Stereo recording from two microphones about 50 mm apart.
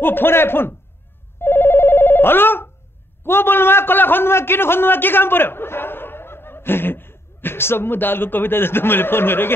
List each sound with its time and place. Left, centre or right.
0.0 s a man's voice: left
1.4 s telephone bell ringing: left
3.3 s a man's voice: left